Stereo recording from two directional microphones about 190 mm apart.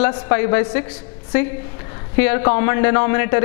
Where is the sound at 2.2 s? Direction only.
15° left (ahead or behind).